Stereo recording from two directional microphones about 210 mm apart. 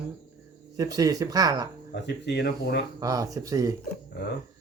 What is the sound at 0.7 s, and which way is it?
Speech, 15° right (ahead or behind).